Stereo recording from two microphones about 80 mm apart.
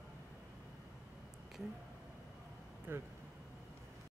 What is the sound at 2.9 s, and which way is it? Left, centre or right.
Speech, right.